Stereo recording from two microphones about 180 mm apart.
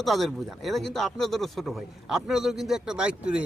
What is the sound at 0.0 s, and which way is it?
A man's voice, centre (ahead or behind).